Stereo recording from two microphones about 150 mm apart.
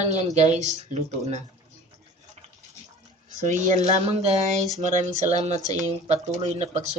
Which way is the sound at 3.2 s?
55° right (ahead or behind).